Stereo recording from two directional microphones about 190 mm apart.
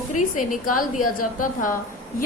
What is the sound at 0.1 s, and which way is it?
A woman's voice, 40° left (ahead or behind).